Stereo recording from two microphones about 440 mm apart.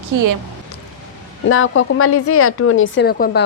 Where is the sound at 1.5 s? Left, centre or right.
Left.